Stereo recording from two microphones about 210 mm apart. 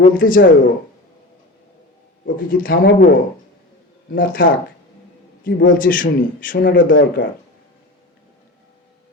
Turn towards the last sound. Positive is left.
turn(degrees=60)  # may be behind; listen again after turning